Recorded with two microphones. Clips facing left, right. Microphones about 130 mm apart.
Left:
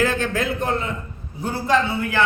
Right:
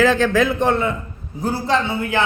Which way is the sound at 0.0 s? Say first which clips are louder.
Right 6 dB; 90° right.